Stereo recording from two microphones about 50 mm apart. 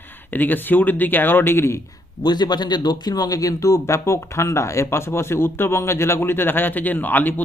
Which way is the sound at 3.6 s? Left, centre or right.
Left.